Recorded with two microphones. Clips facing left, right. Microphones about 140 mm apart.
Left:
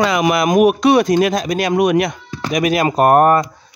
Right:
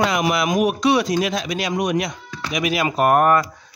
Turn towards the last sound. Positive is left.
turn(degrees=40)  # may be behind; listen again after turning